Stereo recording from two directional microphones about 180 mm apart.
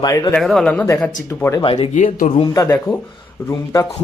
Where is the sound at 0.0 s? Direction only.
20° left (ahead or behind).